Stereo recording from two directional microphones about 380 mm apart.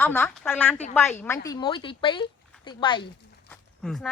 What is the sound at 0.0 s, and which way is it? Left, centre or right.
Speech, centre.